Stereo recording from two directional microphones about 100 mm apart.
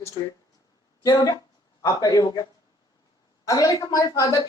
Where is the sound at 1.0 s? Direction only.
40° left (ahead or behind).